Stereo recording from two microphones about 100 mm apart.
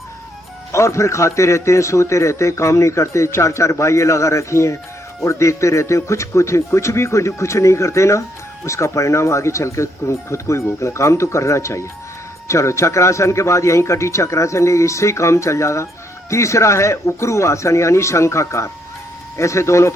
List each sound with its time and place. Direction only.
0.7 s a man's voice: 30° left (ahead or behind)